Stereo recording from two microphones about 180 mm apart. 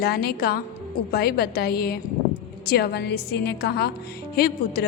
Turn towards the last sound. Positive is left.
turn(degrees=60)  # may be behind; listen again after turning